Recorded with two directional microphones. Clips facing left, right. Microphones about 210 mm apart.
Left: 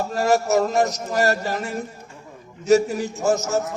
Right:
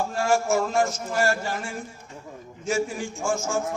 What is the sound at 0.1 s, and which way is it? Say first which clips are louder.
A man's voice: left 5 dB; 40° left (ahead or behind).